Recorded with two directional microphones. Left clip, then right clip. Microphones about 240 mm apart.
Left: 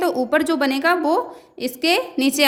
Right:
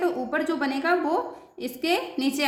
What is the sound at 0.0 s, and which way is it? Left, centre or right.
A woman's voice, left.